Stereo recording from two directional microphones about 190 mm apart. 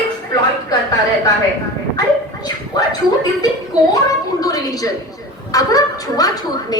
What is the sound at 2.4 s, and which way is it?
Speech, 20° left (ahead or behind).